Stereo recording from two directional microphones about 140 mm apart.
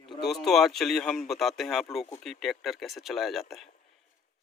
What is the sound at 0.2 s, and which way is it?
Speech, centre (ahead or behind).